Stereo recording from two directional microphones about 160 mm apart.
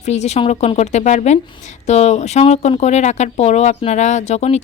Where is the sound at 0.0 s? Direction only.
45° left (ahead or behind).